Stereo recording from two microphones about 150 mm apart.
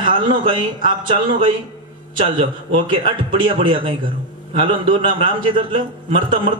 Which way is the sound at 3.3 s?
35° right (ahead or behind).